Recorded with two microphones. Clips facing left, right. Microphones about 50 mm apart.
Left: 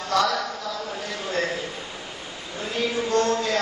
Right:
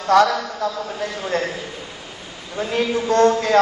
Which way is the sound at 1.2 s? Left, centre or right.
Right.